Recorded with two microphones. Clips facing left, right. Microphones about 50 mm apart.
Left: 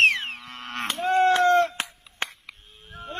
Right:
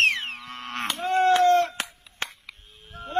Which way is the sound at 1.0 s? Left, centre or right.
Centre.